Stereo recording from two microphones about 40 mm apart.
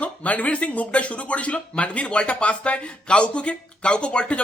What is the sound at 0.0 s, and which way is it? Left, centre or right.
Speech, left.